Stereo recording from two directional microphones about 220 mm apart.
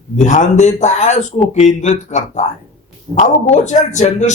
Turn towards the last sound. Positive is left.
turn(degrees=30)  # may be behind; listen again after turning